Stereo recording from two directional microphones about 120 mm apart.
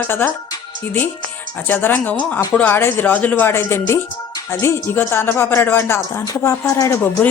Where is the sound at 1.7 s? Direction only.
15° left (ahead or behind).